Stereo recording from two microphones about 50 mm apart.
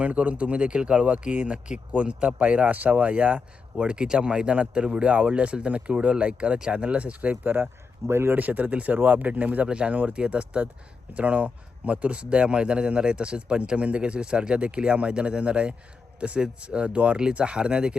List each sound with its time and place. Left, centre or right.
0.0 s speech: right
8.0 s speech: right
8.4 s speech: right; by 17.9 s centre